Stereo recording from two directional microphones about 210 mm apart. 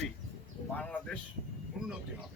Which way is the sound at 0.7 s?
5° left (ahead or behind).